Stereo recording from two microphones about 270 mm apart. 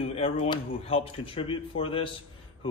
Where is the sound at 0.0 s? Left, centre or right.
Left.